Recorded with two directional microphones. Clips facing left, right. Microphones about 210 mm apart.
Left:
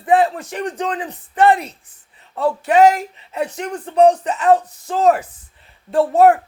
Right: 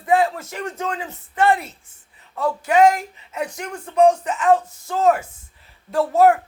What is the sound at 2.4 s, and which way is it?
Speech, 30° left (ahead or behind).